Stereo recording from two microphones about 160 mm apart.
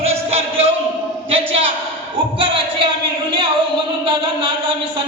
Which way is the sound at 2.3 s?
35° right (ahead or behind).